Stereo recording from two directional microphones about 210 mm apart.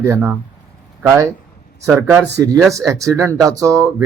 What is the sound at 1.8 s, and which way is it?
Speech, 10° right (ahead or behind).